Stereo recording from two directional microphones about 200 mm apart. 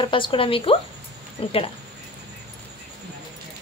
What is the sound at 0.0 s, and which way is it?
A woman's voice, 25° left (ahead or behind).